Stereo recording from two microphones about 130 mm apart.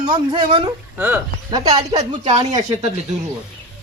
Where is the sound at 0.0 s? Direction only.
35° right (ahead or behind).